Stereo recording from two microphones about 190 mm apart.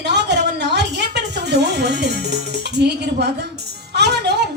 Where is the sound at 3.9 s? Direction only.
60° right (ahead or behind).